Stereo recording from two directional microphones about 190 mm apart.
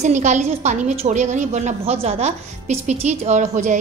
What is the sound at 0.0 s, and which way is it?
A woman's voice, 40° right (ahead or behind).